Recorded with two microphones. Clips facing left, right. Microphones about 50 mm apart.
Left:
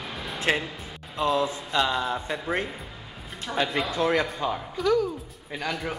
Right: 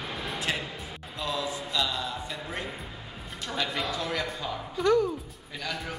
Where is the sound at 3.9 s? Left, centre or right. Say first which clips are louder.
Left 7 dB; left.